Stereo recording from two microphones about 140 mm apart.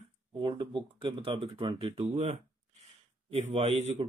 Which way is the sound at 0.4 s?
40° right (ahead or behind).